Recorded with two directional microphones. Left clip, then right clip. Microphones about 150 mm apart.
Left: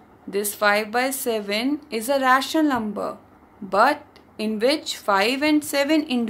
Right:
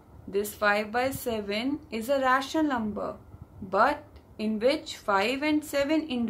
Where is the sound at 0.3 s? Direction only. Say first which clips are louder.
Left 5 dB; 50° left (ahead or behind).